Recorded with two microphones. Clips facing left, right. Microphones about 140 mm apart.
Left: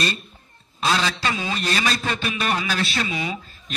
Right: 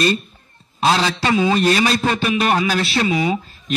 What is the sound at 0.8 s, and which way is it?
A man's voice, 40° right (ahead or behind).